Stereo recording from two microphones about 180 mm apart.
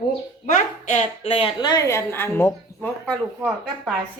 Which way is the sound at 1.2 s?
30° left (ahead or behind).